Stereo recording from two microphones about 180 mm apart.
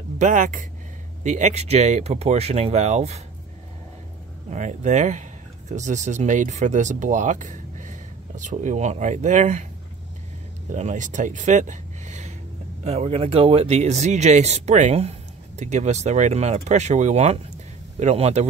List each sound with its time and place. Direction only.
0.2 s speech: 45° right (ahead or behind)
4.5 s speech: 40° right (ahead or behind)
10.7 s speech: 40° right (ahead or behind)